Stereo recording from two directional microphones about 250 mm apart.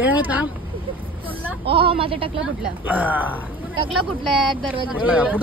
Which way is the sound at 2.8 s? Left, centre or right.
Centre.